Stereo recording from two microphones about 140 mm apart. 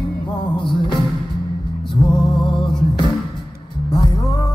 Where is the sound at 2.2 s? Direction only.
30° left (ahead or behind).